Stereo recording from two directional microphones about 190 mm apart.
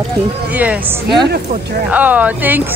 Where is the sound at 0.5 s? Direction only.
10° right (ahead or behind).